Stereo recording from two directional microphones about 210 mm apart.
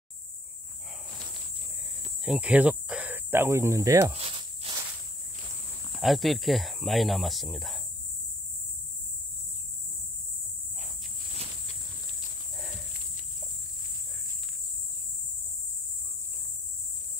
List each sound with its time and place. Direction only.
2.2 s speech: 5° right (ahead or behind)
4.1 s snake: 25° right (ahead or behind)
5.9 s speech: centre (ahead or behind)